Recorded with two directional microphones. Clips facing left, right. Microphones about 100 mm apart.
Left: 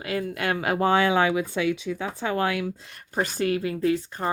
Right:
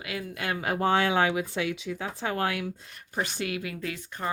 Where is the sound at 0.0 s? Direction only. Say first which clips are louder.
Left 7 dB; 40° left (ahead or behind).